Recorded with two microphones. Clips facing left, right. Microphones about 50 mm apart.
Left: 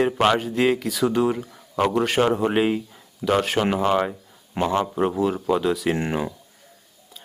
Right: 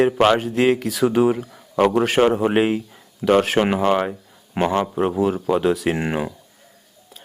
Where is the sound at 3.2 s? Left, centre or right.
Right.